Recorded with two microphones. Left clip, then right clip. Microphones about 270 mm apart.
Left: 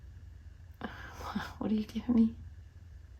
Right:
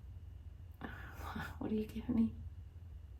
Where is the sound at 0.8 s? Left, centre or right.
Left.